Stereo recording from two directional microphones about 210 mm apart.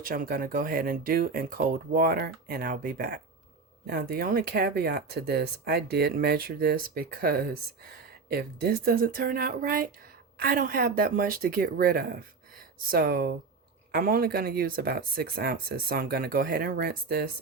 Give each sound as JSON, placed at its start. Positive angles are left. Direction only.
{"t": 0.0, "sound": "speech", "side_deg": -45}